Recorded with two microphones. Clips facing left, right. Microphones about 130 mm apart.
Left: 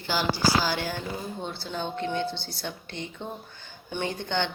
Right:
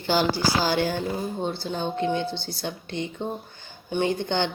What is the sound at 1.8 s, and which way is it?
Speech, 15° right (ahead or behind).